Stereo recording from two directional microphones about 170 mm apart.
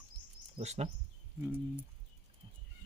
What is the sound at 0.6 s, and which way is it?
Speech, 40° right (ahead or behind).